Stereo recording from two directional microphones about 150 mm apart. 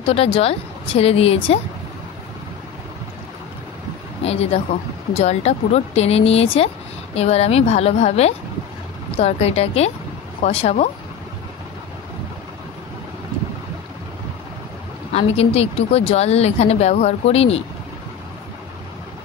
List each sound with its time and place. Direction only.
0.1 s a woman's voice: 40° left (ahead or behind)
4.2 s a woman's voice: 45° left (ahead or behind)
15.1 s a woman's voice: 45° left (ahead or behind)